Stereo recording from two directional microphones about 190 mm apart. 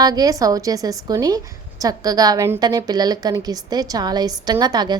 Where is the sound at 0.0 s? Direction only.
20° right (ahead or behind).